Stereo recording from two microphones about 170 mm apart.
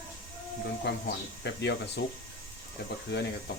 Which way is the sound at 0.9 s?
85° left.